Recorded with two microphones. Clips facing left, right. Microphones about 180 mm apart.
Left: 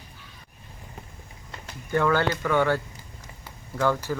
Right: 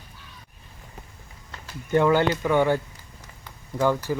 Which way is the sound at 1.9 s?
20° right (ahead or behind).